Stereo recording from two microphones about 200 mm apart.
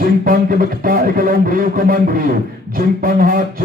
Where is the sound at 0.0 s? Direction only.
45° right (ahead or behind).